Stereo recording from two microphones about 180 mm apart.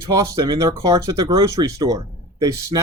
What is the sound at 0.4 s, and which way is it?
Speech, 20° right (ahead or behind).